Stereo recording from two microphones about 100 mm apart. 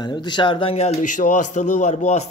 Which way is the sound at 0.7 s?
90° left.